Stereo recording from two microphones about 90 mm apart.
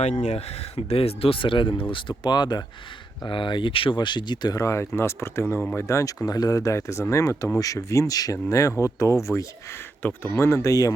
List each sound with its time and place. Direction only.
0.8 s speech: 90° left; by 2.6 s 50° left (ahead or behind)
3.2 s speech: 65° left (ahead or behind)
4.6 s speech: 30° left (ahead or behind)